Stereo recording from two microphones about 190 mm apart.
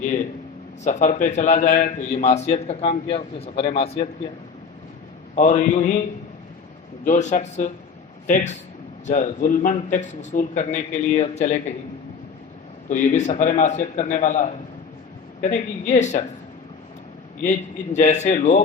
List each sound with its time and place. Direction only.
0.0 s a man's voice: 40° left (ahead or behind)
5.3 s a man's voice: 40° left (ahead or behind)
7.0 s a man's voice: 40° left (ahead or behind)
12.9 s a man's voice: 40° left (ahead or behind)
17.4 s a man's voice: 40° left (ahead or behind)